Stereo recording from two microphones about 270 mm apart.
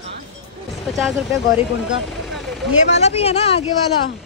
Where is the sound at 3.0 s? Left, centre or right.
Left.